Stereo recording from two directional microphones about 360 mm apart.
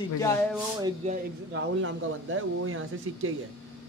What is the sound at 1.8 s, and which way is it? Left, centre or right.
Speech, right.